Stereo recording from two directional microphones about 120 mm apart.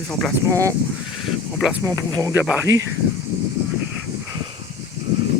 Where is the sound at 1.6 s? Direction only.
5° right (ahead or behind).